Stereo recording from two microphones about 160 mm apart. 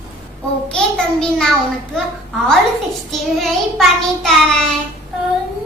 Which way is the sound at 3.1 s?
Centre (ahead or behind).